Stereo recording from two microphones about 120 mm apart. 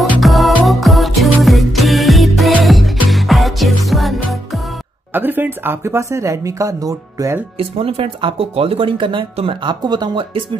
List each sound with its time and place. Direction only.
0.2 s music: centre (ahead or behind)
5.1 s speech: 15° right (ahead or behind)
7.5 s speech: 55° right (ahead or behind)